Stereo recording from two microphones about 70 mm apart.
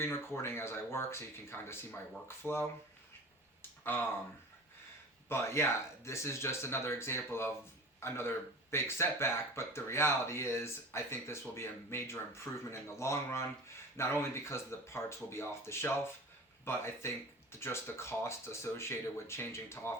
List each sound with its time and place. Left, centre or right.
0.0 s speech: left
5.3 s speech: left